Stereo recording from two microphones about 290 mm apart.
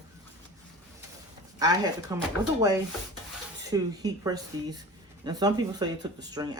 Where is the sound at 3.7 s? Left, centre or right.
Centre.